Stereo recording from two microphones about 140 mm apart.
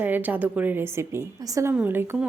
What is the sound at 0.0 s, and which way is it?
Speech, 15° right (ahead or behind).